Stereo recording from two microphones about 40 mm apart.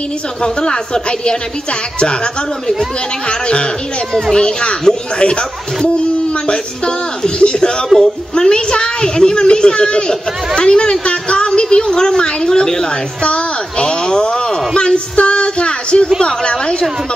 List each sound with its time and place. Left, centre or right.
0.4 s a woman's voice: left
3.3 s a woman's voice: left
7.2 s a woman's voice: left
7.9 s a man's voice: centre
8.4 s a woman's voice: left
15.1 s music: left
16.2 s a woman's voice: left